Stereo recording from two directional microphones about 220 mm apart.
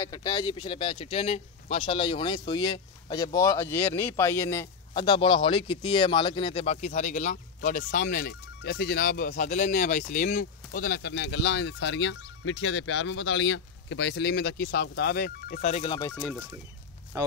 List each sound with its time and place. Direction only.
0.0 s a man's voice: 15° left (ahead or behind)
16.1 s speech: 5° left (ahead or behind)